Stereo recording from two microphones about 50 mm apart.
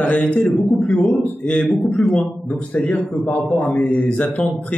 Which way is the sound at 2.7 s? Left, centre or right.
Left.